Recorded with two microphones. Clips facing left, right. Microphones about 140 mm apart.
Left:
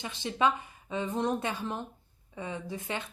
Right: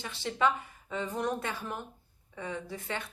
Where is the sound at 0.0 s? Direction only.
20° left (ahead or behind).